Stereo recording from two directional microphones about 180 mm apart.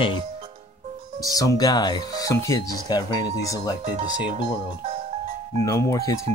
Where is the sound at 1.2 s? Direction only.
20° left (ahead or behind).